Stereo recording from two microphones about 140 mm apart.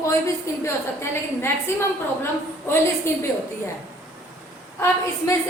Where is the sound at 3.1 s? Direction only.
20° left (ahead or behind).